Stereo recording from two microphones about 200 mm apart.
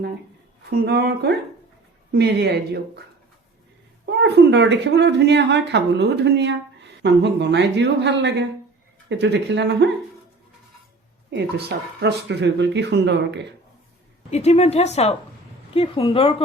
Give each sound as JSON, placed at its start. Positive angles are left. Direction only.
{"t": 0.7, "sound": "a woman's voice", "side_deg": -55}
{"t": 4.0, "sound": "a woman's voice", "side_deg": -60}
{"t": 11.3, "sound": "a woman's voice", "side_deg": -55}
{"t": 14.3, "sound": "a woman's voice", "side_deg": 35}